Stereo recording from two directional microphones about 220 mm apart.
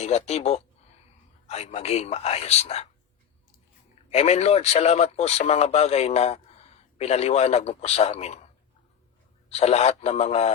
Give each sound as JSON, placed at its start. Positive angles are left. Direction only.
{"t": 0.0, "sound": "speech", "side_deg": 30}
{"t": 4.1, "sound": "speech", "side_deg": 30}
{"t": 9.5, "sound": "speech", "side_deg": 30}